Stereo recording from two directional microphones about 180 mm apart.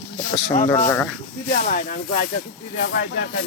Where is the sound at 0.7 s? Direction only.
20° left (ahead or behind).